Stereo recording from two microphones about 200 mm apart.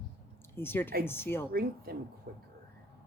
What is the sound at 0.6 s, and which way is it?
Speech, 10° left (ahead or behind).